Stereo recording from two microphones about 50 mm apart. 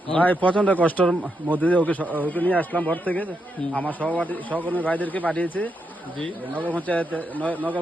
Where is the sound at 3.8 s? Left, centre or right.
Right.